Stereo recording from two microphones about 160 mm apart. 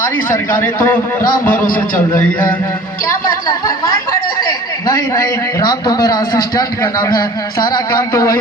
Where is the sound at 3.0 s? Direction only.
25° left (ahead or behind).